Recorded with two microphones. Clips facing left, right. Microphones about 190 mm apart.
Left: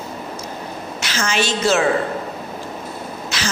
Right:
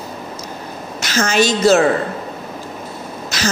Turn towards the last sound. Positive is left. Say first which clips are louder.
# right 5 dB
turn(degrees=-40)  # may be behind; listen again after turning